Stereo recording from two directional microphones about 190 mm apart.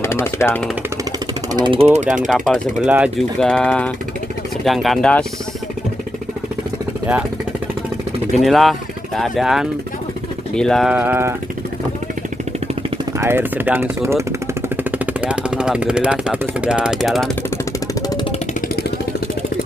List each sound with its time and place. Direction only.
0.0 s speech: 15° left (ahead or behind)
1.5 s speech: 25° right (ahead or behind)
2.0 s speech: centre (ahead or behind)
3.3 s speech: 5° left (ahead or behind)
8.4 s speech: centre (ahead or behind)
13.2 s speech: 10° right (ahead or behind)